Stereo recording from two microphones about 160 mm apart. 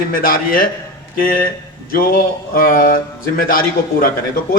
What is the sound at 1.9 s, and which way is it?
A man's voice, 65° left (ahead or behind).